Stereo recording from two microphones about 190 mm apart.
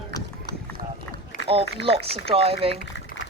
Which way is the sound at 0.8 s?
50° right (ahead or behind).